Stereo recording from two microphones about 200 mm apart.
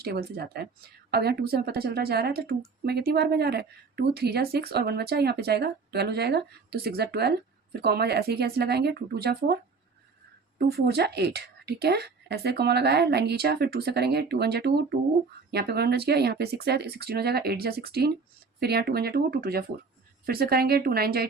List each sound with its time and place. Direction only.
0.0 s speech: 50° right (ahead or behind)
10.7 s a woman's voice: 55° right (ahead or behind)